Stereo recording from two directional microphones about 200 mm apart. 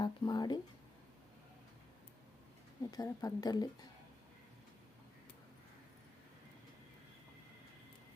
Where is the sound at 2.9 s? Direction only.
20° left (ahead or behind).